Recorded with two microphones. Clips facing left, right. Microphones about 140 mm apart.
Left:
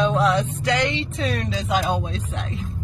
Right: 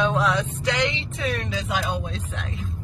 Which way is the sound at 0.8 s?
35° left (ahead or behind).